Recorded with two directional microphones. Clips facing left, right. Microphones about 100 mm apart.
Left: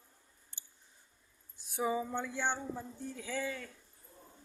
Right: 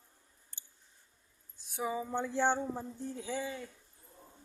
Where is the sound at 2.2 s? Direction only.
30° right (ahead or behind).